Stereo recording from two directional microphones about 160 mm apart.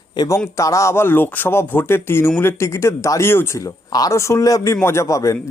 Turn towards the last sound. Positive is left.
turn(degrees=20)  # may be behind; listen again after turning